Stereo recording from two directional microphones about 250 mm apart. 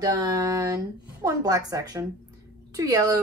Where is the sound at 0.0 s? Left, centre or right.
Centre.